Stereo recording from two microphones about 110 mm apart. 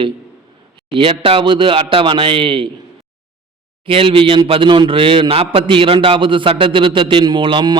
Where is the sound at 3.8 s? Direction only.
55° right (ahead or behind).